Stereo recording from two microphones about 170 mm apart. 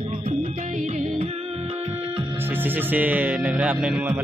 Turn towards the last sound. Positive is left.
turn(degrees=-5)  # may be behind; listen again after turning